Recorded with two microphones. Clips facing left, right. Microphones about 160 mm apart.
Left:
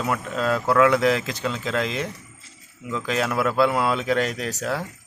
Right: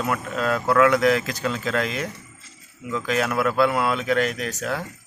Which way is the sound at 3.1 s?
25° left (ahead or behind).